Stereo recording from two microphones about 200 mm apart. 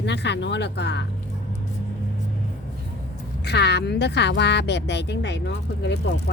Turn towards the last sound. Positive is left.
turn(degrees=60)  # may be behind; listen again after turning